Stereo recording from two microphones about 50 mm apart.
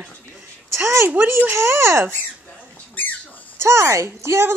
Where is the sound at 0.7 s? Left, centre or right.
Right.